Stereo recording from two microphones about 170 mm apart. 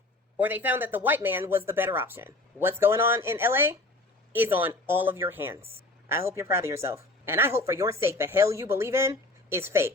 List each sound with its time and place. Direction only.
0.3 s speech: 10° right (ahead or behind)